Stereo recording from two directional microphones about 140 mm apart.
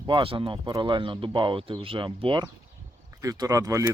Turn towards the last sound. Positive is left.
turn(degrees=-25)  # may be behind; listen again after turning